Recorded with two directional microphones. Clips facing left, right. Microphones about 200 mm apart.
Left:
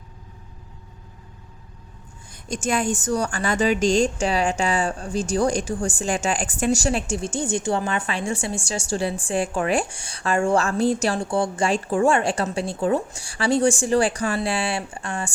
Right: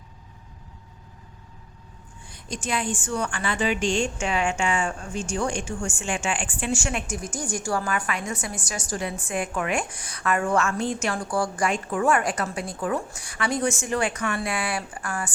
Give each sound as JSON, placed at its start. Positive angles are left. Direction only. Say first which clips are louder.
{"t": 2.3, "sound": "a woman's voice", "louder": "left 5 dB", "side_deg": 45}